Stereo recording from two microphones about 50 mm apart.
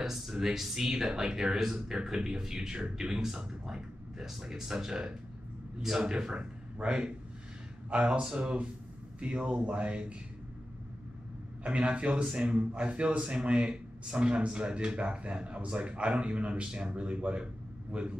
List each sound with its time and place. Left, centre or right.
0.0 s speech: centre; by 10.1 s right
11.6 s speech: right